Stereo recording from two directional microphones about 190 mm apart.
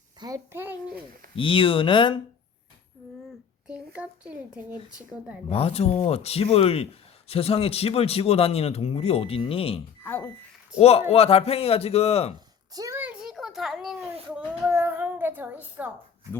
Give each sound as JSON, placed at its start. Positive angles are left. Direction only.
{"t": 0.2, "sound": "a child's voice", "side_deg": -20}
{"t": 1.4, "sound": "speech", "side_deg": 25}
{"t": 3.7, "sound": "speech", "side_deg": -5}
{"t": 5.5, "sound": "a man's voice", "side_deg": 30}
{"t": 10.0, "sound": "a child's voice", "side_deg": 10}
{"t": 10.8, "sound": "a man's voice", "side_deg": 35}
{"t": 12.7, "sound": "a sound", "side_deg": -15}